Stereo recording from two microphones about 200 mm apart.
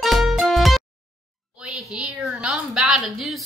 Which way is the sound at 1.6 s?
5° right (ahead or behind).